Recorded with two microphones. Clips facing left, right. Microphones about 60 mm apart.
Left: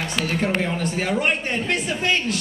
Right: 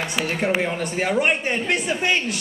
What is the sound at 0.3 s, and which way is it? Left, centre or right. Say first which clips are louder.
A man's voice: right 1 dB; centre.